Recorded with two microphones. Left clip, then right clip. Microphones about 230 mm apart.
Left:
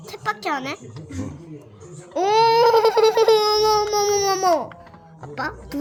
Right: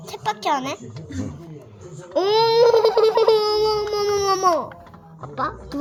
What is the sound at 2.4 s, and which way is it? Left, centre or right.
Babbling, centre.